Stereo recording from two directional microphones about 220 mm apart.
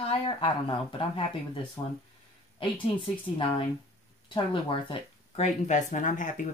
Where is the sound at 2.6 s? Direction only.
25° left (ahead or behind).